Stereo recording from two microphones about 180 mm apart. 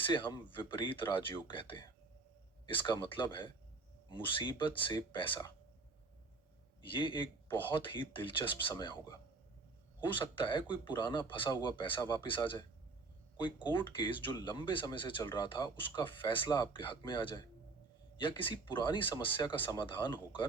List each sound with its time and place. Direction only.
0.0 s speech: 25° left (ahead or behind)
6.9 s speech: 25° left (ahead or behind)
13.9 s speech: 25° left (ahead or behind)